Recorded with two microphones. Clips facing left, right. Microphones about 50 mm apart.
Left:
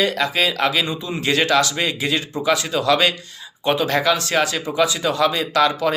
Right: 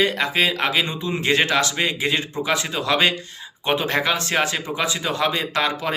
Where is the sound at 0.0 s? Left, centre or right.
Right.